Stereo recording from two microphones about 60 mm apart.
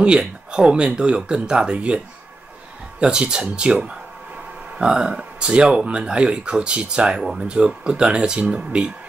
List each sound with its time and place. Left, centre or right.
0.2 s speech: centre
3.0 s speech: centre